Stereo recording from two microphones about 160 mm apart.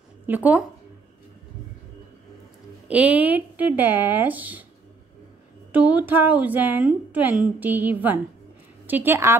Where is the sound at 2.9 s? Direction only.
10° right (ahead or behind).